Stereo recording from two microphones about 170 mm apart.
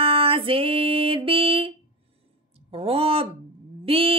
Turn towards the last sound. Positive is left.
turn(degrees=-35)  # may be behind; listen again after turning